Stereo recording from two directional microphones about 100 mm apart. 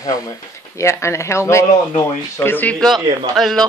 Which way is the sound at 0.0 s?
35° left (ahead or behind).